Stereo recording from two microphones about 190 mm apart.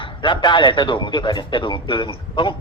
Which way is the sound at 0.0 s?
25° left (ahead or behind).